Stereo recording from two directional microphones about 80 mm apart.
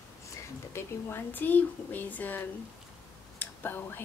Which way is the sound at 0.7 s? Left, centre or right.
Left.